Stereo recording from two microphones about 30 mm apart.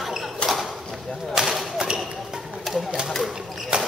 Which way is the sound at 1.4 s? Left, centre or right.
Right.